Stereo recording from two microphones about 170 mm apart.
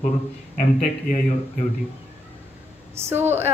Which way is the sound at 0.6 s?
50° left (ahead or behind).